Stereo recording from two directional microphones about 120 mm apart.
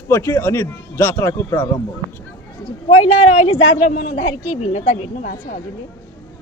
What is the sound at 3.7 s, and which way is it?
A woman's voice, 90° left.